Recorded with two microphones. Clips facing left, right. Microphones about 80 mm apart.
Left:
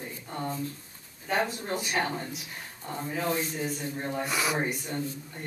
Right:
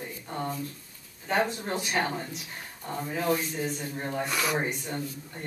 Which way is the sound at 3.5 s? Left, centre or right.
Right.